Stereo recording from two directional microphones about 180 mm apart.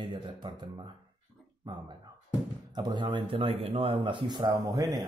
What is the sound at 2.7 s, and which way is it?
Speech, 25° right (ahead or behind).